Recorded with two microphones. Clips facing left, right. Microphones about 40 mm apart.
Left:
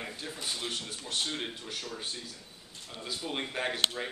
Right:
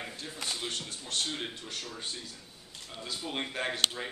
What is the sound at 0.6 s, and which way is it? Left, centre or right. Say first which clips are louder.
Speech: even; centre.